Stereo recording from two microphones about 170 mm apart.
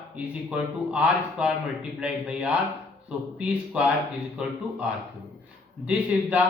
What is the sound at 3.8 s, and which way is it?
Speech, 5° right (ahead or behind).